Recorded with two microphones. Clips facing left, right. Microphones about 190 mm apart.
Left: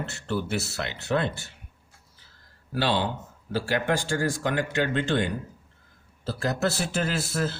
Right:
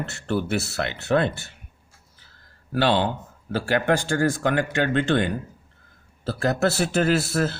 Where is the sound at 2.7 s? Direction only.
55° right (ahead or behind).